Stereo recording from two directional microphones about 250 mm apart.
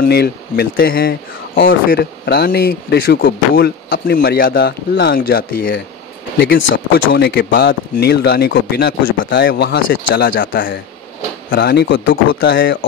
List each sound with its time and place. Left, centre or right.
0.0 s speech: left
6.4 s speech: left